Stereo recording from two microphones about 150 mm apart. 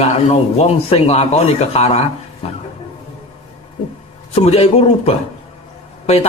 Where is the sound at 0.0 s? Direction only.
45° left (ahead or behind).